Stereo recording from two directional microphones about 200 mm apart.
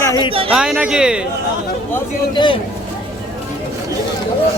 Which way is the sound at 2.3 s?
25° left (ahead or behind).